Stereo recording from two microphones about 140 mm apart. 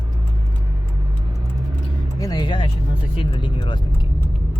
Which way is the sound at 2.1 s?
25° left (ahead or behind).